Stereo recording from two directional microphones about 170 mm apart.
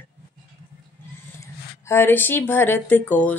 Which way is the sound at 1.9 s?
15° left (ahead or behind).